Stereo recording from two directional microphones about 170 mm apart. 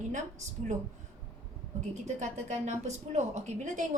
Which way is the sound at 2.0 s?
45° right (ahead or behind).